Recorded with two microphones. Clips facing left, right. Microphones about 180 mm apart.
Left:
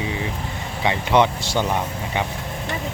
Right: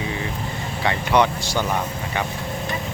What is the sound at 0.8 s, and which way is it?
Speech, 20° left (ahead or behind).